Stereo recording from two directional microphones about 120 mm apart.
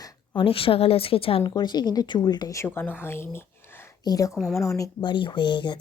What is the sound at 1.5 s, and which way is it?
A woman's voice, 35° left (ahead or behind).